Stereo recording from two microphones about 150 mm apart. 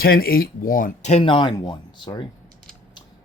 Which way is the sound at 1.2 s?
35° left (ahead or behind).